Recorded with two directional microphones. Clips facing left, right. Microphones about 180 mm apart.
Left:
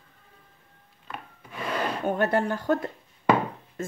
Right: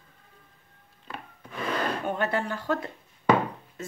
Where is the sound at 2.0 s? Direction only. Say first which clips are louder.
Left 4 dB; 45° left (ahead or behind).